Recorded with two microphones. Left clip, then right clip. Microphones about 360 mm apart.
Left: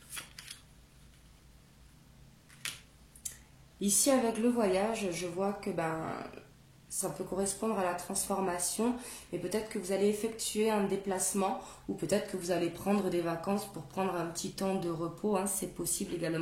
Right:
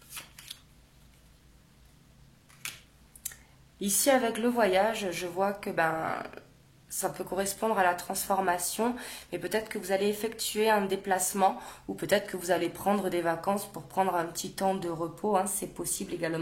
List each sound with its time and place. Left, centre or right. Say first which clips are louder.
0.5 s scissors: right 4 dB; centre
3.8 s a woman's voice: right 3 dB; right
7.0 s a woman's voice: right 4 dB; right